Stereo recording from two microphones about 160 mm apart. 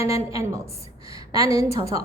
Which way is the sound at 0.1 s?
20° right (ahead or behind).